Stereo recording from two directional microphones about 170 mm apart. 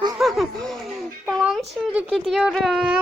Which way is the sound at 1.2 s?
5° right (ahead or behind).